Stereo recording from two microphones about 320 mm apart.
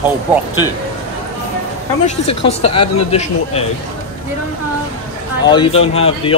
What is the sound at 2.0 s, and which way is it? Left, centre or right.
Speech, centre.